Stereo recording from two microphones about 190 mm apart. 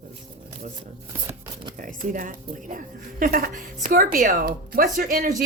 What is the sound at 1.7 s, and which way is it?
A woman's voice, 45° right (ahead or behind).